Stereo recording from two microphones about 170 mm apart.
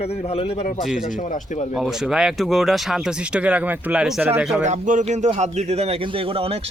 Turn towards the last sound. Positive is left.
turn(degrees=-35)  # may be behind; listen again after turning